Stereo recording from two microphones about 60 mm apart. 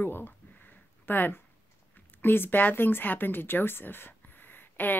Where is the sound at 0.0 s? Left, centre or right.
Left.